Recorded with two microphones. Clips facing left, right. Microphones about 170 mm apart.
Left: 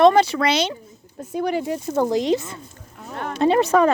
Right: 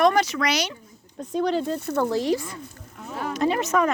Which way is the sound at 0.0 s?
25° left (ahead or behind).